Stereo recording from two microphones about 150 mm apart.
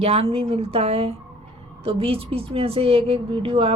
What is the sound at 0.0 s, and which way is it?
A woman's voice, 40° right (ahead or behind).